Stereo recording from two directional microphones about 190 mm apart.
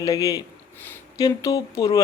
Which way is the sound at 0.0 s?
20° left (ahead or behind).